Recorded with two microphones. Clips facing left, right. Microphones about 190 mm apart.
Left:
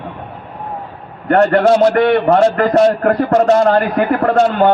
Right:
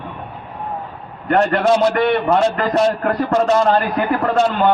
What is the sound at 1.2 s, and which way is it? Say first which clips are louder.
A man's voice: left 4 dB; 55° left (ahead or behind).